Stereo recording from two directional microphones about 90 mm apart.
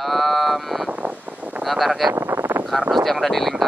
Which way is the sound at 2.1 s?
20° right (ahead or behind).